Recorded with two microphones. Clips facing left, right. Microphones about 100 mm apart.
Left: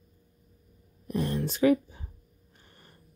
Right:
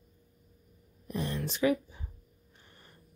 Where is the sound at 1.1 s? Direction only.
45° left (ahead or behind).